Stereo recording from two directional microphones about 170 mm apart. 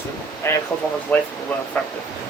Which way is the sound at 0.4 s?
15° left (ahead or behind).